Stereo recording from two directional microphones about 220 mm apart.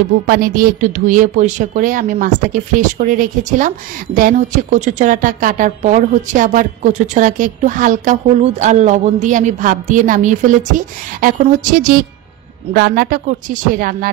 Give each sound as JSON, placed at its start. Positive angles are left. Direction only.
{"t": 0.3, "sound": "a woman's voice", "side_deg": -40}